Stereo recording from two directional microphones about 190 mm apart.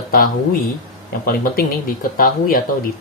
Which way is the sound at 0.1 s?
50° left (ahead or behind).